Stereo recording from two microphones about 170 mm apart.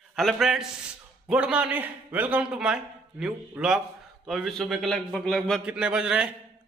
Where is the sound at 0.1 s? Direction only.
Centre (ahead or behind).